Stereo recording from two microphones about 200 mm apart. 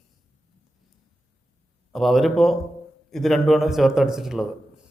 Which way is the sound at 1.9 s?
Centre (ahead or behind).